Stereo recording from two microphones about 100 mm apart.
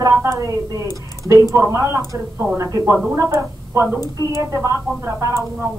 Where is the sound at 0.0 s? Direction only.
30° right (ahead or behind).